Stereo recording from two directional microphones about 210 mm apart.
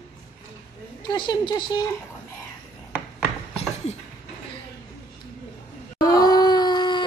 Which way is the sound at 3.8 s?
30° left (ahead or behind).